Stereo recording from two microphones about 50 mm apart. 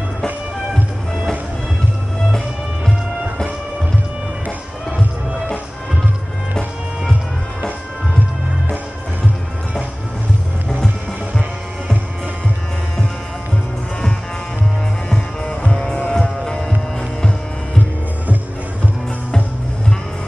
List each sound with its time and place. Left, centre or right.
15.0 s music: centre